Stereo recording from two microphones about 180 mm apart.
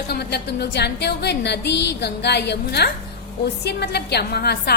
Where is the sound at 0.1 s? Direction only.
65° left (ahead or behind).